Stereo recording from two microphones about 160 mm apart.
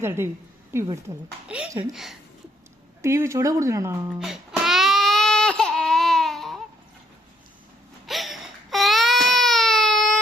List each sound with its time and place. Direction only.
0.0 s speech: 15° right (ahead or behind)
3.0 s speech: 15° right (ahead or behind)
4.2 s music: centre (ahead or behind)
8.0 s baby cry: centre (ahead or behind)